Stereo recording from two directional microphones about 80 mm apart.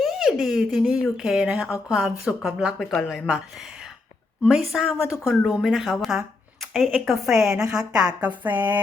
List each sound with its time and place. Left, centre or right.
0.0 s speech: centre
4.4 s a woman's voice: centre
7.3 s a woman's voice: centre
8.4 s speech: right